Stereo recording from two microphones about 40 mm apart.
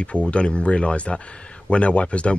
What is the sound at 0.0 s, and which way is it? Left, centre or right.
Speech, left.